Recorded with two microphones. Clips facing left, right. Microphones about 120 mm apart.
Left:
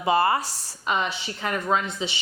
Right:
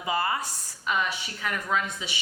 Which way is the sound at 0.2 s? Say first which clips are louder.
Left 6 dB; 30° left (ahead or behind).